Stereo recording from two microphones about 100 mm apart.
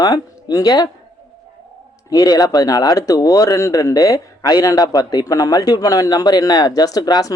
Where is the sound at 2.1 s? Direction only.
40° left (ahead or behind).